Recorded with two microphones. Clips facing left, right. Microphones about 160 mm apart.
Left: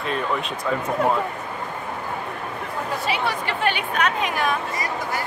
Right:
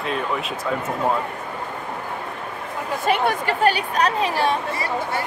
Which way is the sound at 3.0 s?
50° right (ahead or behind).